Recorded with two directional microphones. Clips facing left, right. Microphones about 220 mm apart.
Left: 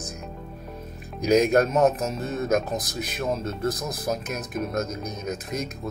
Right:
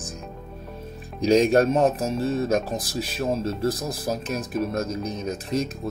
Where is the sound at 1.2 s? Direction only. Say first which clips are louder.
Right 2 dB; 30° right (ahead or behind).